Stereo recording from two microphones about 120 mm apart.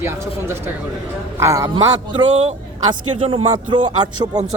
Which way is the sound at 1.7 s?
40° right (ahead or behind).